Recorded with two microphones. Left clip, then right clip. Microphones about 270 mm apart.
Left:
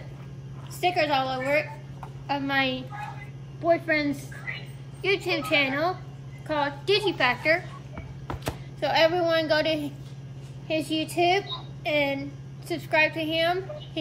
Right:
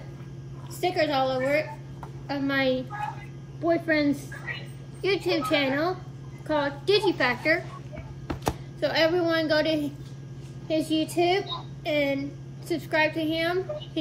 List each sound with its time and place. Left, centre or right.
0.7 s a woman's voice: centre
8.7 s a woman's voice: centre